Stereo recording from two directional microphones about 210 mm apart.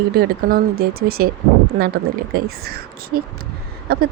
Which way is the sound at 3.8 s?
50° right (ahead or behind).